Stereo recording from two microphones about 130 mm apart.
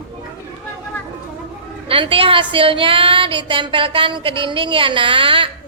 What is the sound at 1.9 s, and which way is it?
A woman's voice, 45° right (ahead or behind).